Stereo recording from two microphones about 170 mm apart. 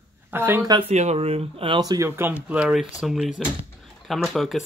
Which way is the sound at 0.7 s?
40° right (ahead or behind).